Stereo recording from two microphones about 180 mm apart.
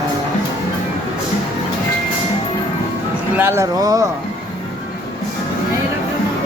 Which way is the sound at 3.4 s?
15° right (ahead or behind).